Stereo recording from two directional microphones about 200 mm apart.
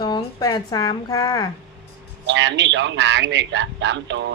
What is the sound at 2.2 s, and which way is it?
Speech, 65° right (ahead or behind).